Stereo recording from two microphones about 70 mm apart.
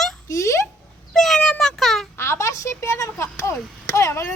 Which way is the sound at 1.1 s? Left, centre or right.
Centre.